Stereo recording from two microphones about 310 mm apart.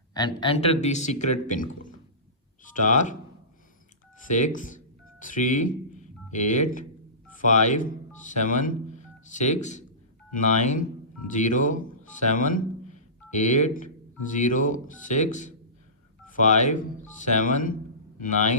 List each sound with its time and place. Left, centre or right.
0.1 s speech: centre
4.2 s a man's voice: left